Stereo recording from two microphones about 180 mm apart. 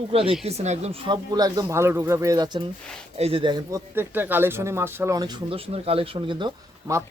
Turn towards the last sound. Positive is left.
turn(degrees=-25)  # may be behind; listen again after turning